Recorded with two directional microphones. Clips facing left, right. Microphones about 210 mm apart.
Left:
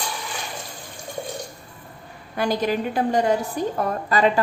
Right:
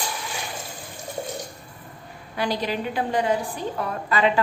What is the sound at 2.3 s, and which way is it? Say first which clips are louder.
A woman's voice: left 4 dB; 45° left (ahead or behind).